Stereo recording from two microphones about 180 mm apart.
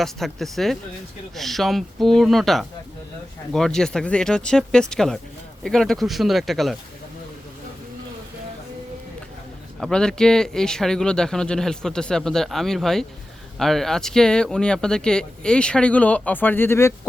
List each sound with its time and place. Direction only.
0.0 s speech: centre (ahead or behind)
9.8 s speech: 5° left (ahead or behind)